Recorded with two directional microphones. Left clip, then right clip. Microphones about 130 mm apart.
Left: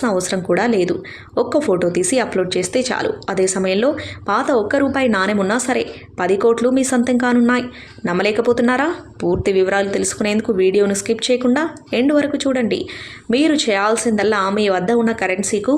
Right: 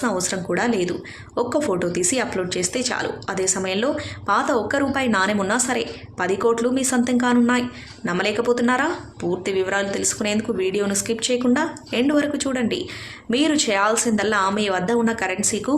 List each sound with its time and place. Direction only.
0.0 s a woman's voice: 35° left (ahead or behind)